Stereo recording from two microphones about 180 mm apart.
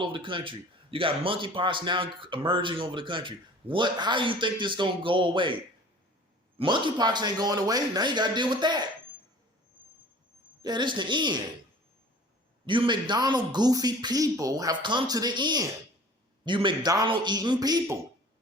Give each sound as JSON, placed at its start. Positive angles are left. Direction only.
{"t": 0.0, "sound": "a man's voice", "side_deg": -30}
{"t": 6.6, "sound": "a man's voice", "side_deg": -25}
{"t": 10.6, "sound": "a man's voice", "side_deg": -25}
{"t": 12.6, "sound": "a man's voice", "side_deg": -25}